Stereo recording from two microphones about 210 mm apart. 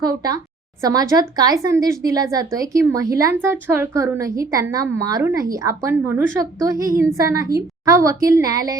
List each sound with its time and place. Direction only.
0.0 s speech: 20° right (ahead or behind)